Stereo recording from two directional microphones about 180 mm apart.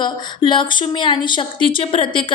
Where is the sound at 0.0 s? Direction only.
25° left (ahead or behind).